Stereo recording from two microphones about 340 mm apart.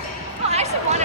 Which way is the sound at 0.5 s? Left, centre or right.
Centre.